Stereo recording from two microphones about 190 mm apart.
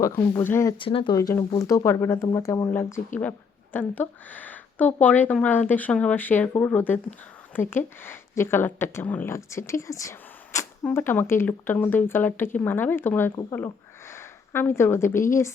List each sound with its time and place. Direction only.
0.0 s a woman's voice: 10° left (ahead or behind)
0.8 s a woman's voice: 25° left (ahead or behind)